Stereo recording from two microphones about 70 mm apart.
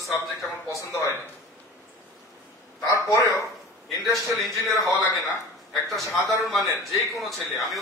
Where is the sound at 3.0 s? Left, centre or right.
Left.